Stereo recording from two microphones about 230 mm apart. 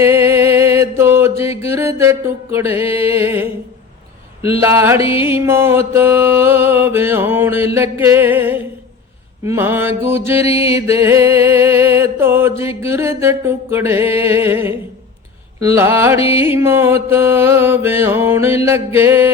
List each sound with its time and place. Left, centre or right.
0.0 s mantra: centre
1.6 s music: centre
4.6 s music: centre
4.9 s music: left
5.2 s music: centre